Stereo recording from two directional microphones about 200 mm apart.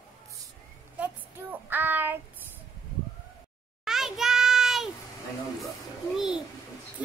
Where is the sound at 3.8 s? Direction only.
Centre (ahead or behind).